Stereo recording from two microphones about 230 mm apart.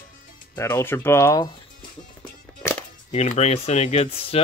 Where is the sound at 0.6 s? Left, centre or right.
Centre.